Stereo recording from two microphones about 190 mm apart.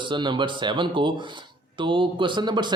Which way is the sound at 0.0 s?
25° right (ahead or behind).